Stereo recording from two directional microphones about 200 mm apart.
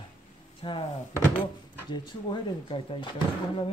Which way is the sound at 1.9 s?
25° left (ahead or behind).